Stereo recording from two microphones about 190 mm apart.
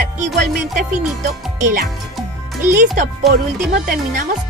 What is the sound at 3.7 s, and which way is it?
Speech, 40° right (ahead or behind).